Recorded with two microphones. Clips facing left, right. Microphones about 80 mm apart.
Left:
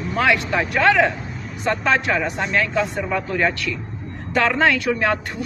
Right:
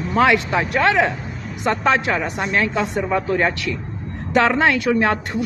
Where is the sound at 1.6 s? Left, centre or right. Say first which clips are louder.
Right 1 dB; right.